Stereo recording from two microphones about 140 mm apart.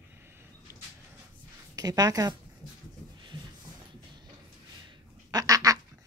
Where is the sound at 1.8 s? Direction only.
25° right (ahead or behind).